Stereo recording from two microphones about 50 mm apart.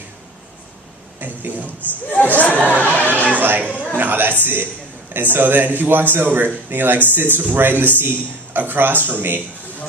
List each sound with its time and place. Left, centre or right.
1.2 s speech: right
1.8 s speech: left
2.9 s chatter: right
3.3 s chatter: right
3.6 s chatter: left
3.9 s speech: right